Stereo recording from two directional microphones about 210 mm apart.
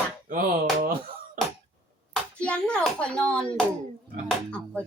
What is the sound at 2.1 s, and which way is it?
A child's voice, 5° left (ahead or behind).